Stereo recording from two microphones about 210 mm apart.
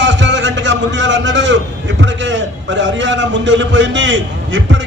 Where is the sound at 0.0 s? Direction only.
60° right (ahead or behind).